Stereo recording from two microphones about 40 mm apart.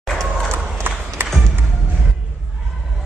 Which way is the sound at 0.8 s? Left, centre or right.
Right.